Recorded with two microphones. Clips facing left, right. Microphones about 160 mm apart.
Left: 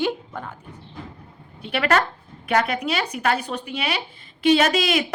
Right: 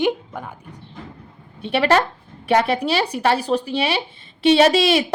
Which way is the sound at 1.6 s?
25° right (ahead or behind).